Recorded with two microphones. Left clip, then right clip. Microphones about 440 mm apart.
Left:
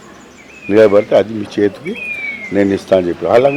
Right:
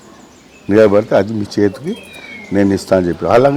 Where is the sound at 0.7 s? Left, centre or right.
Right.